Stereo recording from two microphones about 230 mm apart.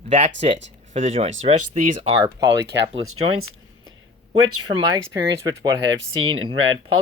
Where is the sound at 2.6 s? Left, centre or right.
Right.